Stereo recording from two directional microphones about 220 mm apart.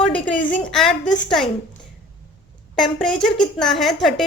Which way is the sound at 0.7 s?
Centre (ahead or behind).